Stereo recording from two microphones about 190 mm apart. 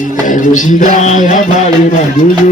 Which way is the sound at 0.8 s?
40° left (ahead or behind).